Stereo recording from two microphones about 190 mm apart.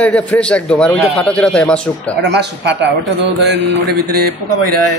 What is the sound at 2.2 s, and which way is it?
A man's voice, 60° right (ahead or behind).